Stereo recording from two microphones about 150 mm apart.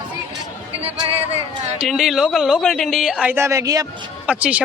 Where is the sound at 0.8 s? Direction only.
40° right (ahead or behind).